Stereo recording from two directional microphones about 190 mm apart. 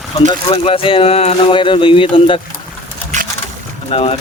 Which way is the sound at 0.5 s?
30° left (ahead or behind).